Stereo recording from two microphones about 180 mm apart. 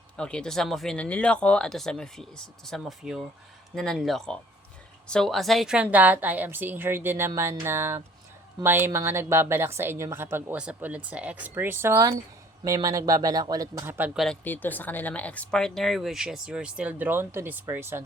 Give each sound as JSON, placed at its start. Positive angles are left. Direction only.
{"t": 0.2, "sound": "a woman's voice", "side_deg": 5}
{"t": 14.3, "sound": "speech", "side_deg": 10}